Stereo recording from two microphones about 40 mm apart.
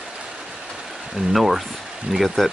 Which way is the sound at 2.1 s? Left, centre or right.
Centre.